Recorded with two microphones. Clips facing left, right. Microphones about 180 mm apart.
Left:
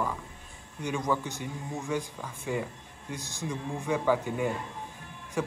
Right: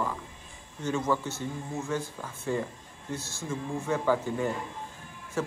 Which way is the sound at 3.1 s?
15° left (ahead or behind).